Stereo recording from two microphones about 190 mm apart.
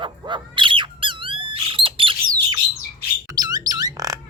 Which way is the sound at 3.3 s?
20° right (ahead or behind).